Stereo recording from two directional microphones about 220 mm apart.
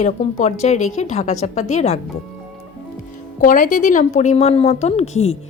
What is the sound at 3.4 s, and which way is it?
Speech, 40° left (ahead or behind).